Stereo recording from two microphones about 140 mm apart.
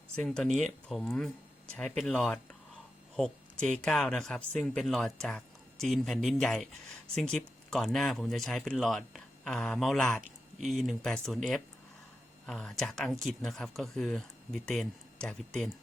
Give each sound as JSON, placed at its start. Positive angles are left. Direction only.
{"t": 0.2, "sound": "speech", "side_deg": 5}
{"t": 12.5, "sound": "speech", "side_deg": 5}